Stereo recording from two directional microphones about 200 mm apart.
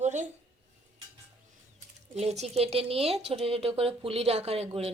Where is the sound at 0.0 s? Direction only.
35° right (ahead or behind).